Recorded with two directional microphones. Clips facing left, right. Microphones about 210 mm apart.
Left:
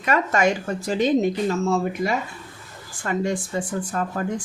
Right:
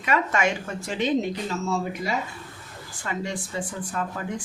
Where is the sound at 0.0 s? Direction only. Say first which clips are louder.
Left 4 dB; 40° left (ahead or behind).